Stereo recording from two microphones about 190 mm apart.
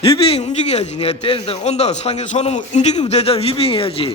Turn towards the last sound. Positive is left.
turn(degrees=30)  # may be behind; listen again after turning